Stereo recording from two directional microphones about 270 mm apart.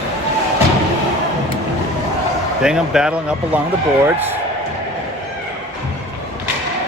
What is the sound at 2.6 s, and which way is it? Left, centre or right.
Speech, centre.